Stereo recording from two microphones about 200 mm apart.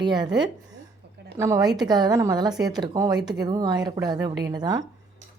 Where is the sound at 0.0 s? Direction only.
20° right (ahead or behind).